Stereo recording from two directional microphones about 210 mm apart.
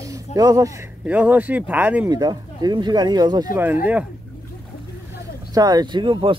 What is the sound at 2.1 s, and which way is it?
Speech, 20° right (ahead or behind).